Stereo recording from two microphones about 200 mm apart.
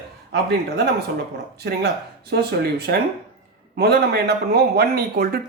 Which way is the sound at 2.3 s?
50° right (ahead or behind).